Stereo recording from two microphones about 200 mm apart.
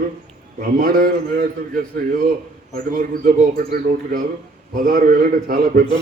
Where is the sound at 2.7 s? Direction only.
45° right (ahead or behind).